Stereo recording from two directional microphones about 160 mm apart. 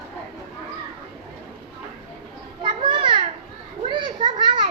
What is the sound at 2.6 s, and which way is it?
Children playing, 30° right (ahead or behind).